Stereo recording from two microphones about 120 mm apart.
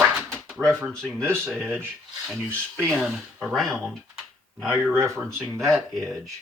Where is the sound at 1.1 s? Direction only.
20° right (ahead or behind).